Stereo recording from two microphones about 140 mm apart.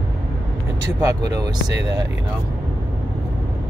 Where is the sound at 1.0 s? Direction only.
20° right (ahead or behind).